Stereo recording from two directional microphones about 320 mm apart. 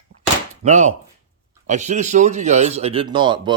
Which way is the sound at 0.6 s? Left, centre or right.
Right.